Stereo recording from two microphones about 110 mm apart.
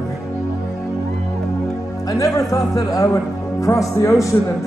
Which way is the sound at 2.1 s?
30° left (ahead or behind).